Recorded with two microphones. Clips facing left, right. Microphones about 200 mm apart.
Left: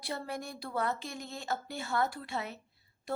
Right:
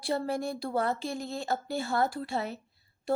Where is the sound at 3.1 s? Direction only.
30° right (ahead or behind).